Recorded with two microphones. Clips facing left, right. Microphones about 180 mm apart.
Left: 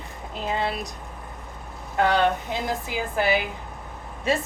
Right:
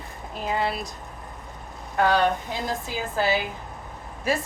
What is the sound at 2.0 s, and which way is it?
A woman's voice, 20° left (ahead or behind).